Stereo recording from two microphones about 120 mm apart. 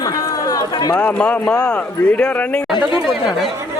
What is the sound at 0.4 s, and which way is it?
Chatter, 30° left (ahead or behind).